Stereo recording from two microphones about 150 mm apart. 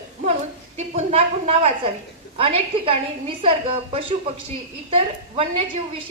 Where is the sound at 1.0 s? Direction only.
45° right (ahead or behind).